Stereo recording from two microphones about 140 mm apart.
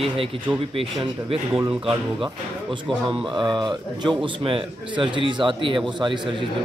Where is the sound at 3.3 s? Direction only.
35° right (ahead or behind).